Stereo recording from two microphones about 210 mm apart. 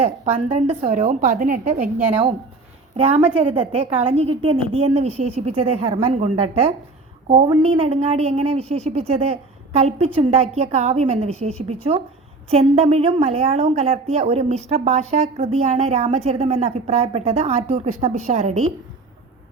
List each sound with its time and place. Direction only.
0.5 s a woman's voice: 30° right (ahead or behind)
2.9 s a woman's voice: 25° right (ahead or behind)